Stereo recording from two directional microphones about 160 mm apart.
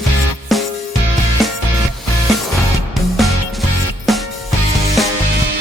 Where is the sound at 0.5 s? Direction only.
Centre (ahead or behind).